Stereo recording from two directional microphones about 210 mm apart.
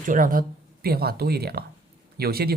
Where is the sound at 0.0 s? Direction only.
40° right (ahead or behind).